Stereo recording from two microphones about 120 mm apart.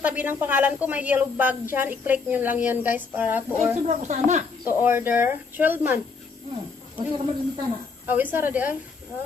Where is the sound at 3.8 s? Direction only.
80° right.